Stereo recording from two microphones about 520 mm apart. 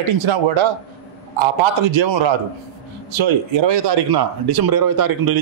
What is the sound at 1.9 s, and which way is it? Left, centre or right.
Speech, right.